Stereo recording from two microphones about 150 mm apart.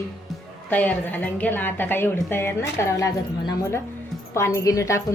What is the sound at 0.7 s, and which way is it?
A woman's voice, 10° left (ahead or behind).